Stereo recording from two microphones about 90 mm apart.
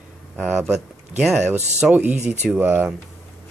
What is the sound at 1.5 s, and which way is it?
Speech, 15° right (ahead or behind).